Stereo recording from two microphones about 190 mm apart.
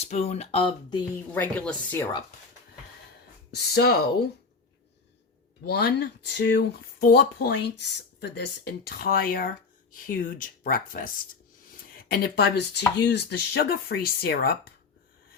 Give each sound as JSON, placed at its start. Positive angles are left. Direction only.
{"t": 0.0, "sound": "speech", "side_deg": 35}
{"t": 1.3, "sound": "speech", "side_deg": 10}
{"t": 3.8, "sound": "speech", "side_deg": 55}
{"t": 5.6, "sound": "speech", "side_deg": 60}